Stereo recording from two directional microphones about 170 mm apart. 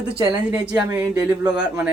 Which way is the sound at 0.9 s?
10° right (ahead or behind).